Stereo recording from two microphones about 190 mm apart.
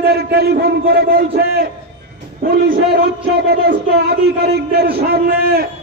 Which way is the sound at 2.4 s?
50° right (ahead or behind).